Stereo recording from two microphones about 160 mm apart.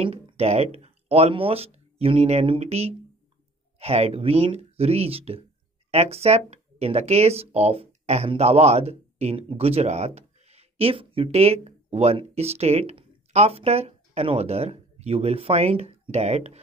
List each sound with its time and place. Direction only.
0.0 s speech: 35° right (ahead or behind)